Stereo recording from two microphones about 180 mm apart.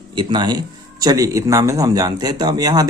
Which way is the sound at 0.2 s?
25° right (ahead or behind).